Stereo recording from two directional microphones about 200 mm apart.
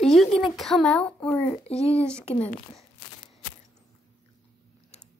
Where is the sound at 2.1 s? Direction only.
5° left (ahead or behind).